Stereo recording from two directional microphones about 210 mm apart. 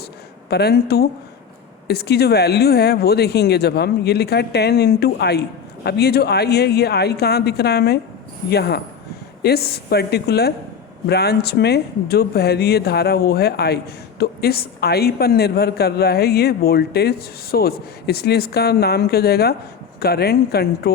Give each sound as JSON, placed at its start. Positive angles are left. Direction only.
{"t": 0.5, "sound": "speech", "side_deg": 50}